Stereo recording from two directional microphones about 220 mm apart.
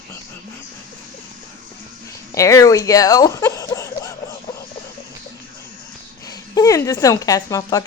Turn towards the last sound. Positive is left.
turn(degrees=15)  # may be behind; listen again after turning